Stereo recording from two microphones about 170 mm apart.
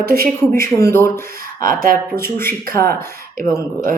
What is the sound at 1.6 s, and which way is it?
Speech, 55° right (ahead or behind).